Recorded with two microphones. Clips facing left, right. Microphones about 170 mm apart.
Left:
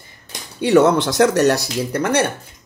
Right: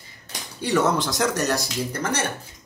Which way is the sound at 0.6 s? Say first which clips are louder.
Left 8 dB; 65° left (ahead or behind).